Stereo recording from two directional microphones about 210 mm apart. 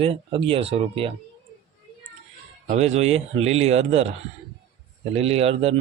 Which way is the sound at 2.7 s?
30° right (ahead or behind).